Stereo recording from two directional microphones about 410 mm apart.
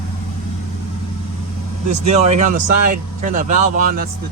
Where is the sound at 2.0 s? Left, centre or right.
Centre.